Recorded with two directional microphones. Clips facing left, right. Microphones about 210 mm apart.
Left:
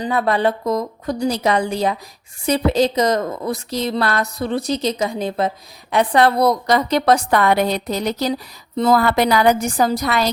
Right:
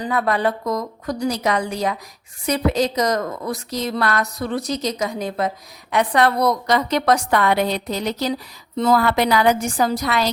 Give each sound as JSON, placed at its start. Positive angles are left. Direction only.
{"t": 0.0, "sound": "a woman's voice", "side_deg": 30}